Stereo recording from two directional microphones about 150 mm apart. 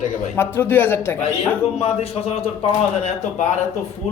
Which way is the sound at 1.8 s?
40° left (ahead or behind).